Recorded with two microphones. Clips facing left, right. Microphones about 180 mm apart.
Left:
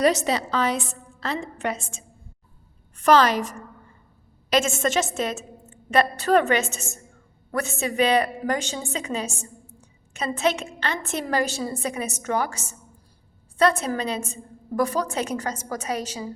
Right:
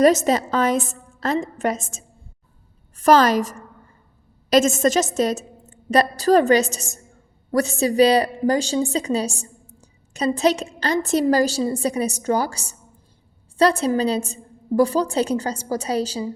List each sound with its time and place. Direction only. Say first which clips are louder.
0.0 s a woman's voice: right 5 dB; 45° right (ahead or behind)